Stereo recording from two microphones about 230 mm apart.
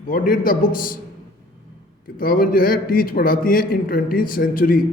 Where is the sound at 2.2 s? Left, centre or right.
Left.